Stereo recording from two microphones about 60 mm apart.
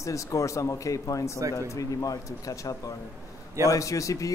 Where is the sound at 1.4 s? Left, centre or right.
Right.